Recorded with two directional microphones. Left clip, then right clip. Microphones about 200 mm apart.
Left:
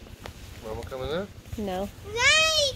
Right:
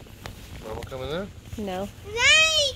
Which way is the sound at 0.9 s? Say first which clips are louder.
Left 1 dB; 15° left (ahead or behind).